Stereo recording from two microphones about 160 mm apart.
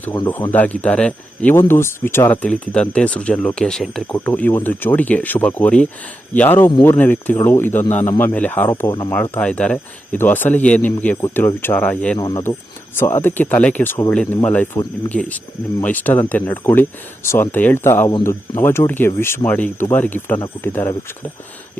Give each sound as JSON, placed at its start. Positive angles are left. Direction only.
{"t": 0.5, "sound": "speech", "side_deg": 10}